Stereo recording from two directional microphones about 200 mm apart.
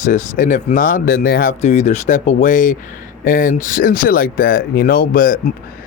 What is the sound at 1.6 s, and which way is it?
Speech, 35° left (ahead or behind).